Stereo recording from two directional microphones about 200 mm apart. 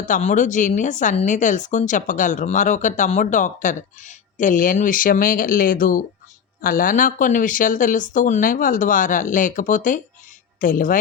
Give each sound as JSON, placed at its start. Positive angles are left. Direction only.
{"t": 0.0, "sound": "a woman's voice", "side_deg": 40}